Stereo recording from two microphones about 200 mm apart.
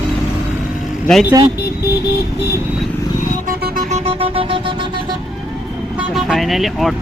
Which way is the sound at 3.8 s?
35° right (ahead or behind).